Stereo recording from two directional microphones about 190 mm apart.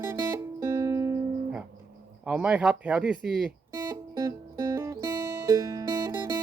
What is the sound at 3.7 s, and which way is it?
Music, 15° right (ahead or behind).